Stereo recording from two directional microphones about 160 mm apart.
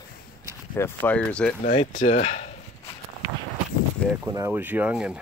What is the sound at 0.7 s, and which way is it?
Speech, 10° left (ahead or behind).